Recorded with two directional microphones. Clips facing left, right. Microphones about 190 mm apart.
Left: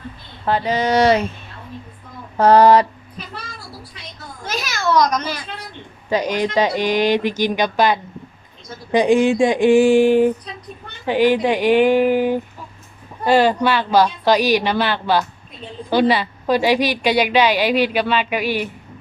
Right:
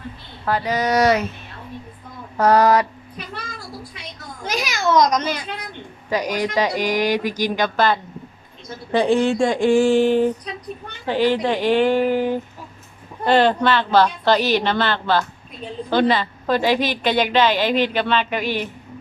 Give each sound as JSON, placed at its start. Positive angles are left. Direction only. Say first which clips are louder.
{"t": 0.4, "sound": "speech", "louder": "left 2 dB", "side_deg": 25}
{"t": 2.4, "sound": "speech", "louder": "left 4 dB", "side_deg": 30}
{"t": 4.4, "sound": "a child's voice", "louder": "even", "side_deg": -15}
{"t": 6.1, "sound": "a woman's voice", "louder": "left 3 dB", "side_deg": 25}